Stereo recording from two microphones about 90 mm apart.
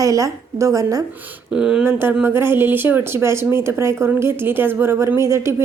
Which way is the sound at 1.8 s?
20° right (ahead or behind).